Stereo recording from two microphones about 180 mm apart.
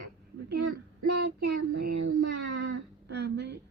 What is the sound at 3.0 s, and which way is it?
Speech, 70° right (ahead or behind).